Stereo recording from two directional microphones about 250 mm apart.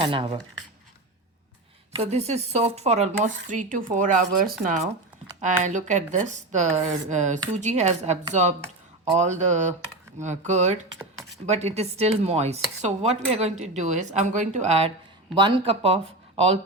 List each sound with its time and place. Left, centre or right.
0.0 s speech: centre
2.0 s speech: right